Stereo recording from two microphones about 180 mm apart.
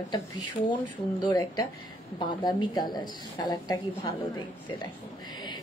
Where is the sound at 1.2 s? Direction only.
20° left (ahead or behind).